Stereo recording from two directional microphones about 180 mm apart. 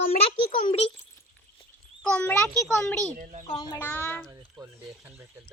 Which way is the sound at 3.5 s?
25° left (ahead or behind).